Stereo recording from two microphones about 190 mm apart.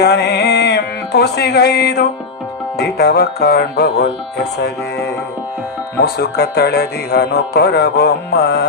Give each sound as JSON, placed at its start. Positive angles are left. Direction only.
{"t": 0.0, "sound": "music", "side_deg": 60}
{"t": 2.7, "sound": "speech", "side_deg": 60}